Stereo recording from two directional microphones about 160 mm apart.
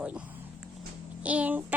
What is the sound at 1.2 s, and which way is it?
Speech, 10° right (ahead or behind).